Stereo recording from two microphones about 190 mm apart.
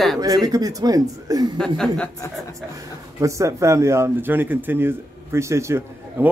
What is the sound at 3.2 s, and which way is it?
A man's voice, 15° right (ahead or behind).